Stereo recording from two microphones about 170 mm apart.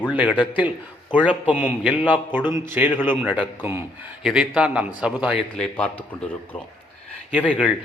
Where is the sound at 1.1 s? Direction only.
25° left (ahead or behind).